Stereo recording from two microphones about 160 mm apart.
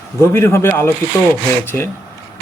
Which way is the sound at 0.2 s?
15° left (ahead or behind).